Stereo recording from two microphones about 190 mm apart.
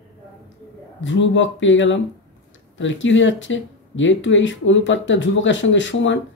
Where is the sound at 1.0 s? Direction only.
75° left (ahead or behind).